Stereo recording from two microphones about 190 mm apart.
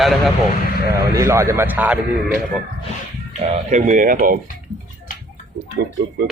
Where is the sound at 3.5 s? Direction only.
40° right (ahead or behind).